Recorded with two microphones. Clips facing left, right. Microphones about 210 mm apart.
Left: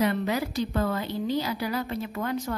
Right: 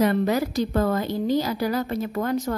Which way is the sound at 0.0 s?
45° right (ahead or behind).